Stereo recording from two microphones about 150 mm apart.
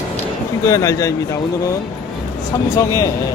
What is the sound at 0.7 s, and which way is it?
Speech, 20° left (ahead or behind).